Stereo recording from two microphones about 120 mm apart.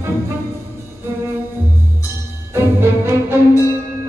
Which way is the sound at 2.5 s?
20° right (ahead or behind).